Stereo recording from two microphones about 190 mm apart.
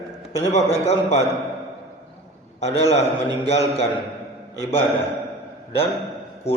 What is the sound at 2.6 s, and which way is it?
Speech, 35° left (ahead or behind).